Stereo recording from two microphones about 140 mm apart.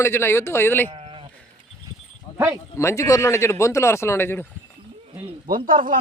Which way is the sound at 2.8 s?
20° left (ahead or behind).